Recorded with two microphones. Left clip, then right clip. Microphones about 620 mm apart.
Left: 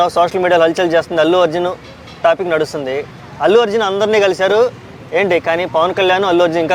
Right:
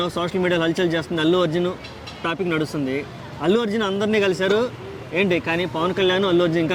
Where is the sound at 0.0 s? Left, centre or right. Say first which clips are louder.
Left 10 dB; left.